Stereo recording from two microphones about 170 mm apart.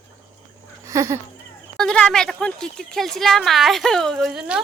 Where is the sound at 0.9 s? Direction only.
20° right (ahead or behind).